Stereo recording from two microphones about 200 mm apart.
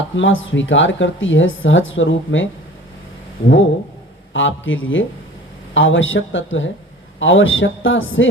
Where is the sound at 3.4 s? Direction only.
30° left (ahead or behind).